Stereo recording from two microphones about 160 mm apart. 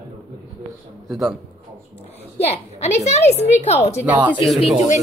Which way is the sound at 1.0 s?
Centre (ahead or behind).